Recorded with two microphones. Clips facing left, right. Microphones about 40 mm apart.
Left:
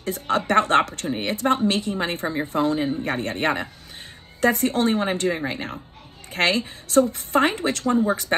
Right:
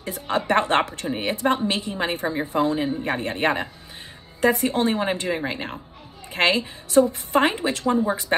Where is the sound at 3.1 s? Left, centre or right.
Right.